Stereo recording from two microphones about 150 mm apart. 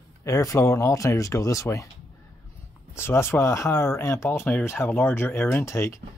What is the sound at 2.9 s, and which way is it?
Speech, 15° left (ahead or behind).